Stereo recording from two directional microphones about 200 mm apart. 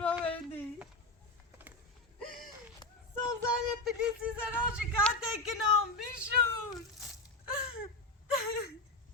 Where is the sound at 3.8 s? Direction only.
5° right (ahead or behind).